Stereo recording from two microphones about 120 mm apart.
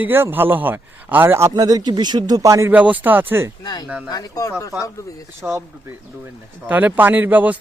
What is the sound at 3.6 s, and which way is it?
Speech, 35° left (ahead or behind).